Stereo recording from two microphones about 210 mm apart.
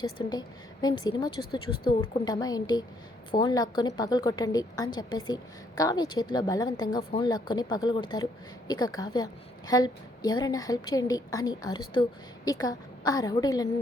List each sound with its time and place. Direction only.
0.0 s a woman's voice: 20° left (ahead or behind)